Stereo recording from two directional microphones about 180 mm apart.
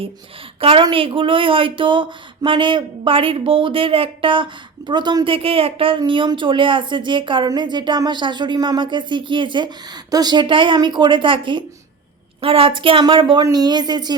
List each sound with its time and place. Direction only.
0.6 s speech: 30° right (ahead or behind)